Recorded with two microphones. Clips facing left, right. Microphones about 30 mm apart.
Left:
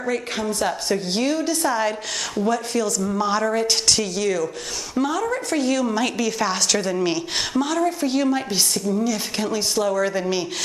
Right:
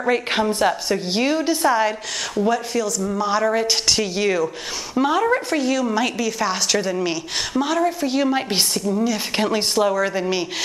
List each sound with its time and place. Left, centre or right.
0.0 s a woman's voice: right
0.8 s a woman's voice: centre
3.4 s a woman's voice: centre
4.1 s speech: right
5.5 s a woman's voice: centre
9.4 s a woman's voice: right
9.8 s a woman's voice: centre